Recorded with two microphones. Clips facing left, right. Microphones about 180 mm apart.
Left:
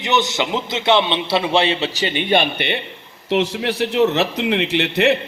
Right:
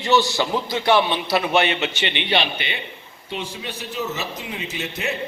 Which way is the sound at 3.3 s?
75° left (ahead or behind).